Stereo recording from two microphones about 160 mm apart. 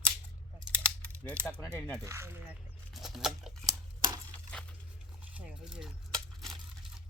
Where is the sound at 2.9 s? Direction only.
Centre (ahead or behind).